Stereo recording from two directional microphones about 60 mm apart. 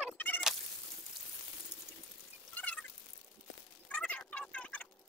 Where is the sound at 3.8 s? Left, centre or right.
Left.